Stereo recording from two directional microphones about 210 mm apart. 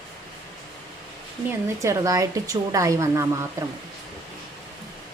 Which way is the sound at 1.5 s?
15° right (ahead or behind).